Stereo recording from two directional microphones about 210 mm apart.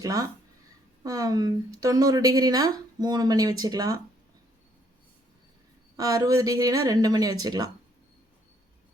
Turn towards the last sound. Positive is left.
turn(degrees=-15)  # may be behind; listen again after turning